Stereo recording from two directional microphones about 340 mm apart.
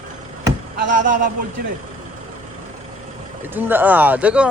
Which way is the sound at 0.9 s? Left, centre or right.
Right.